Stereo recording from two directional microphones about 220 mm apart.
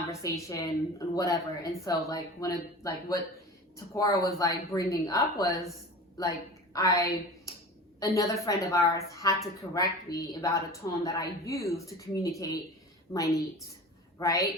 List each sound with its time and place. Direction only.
0.1 s speech: 15° left (ahead or behind)